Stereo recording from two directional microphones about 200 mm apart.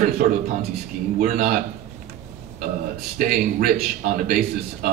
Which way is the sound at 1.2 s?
45° right (ahead or behind).